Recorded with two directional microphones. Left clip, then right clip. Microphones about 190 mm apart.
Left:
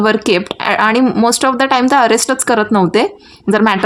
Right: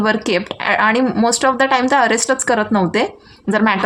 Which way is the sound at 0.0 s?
30° left (ahead or behind).